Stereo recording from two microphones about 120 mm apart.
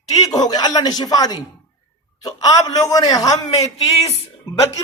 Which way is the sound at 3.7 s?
60° left (ahead or behind).